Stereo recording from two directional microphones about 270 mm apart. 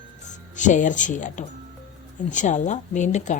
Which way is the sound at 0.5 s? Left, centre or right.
Left.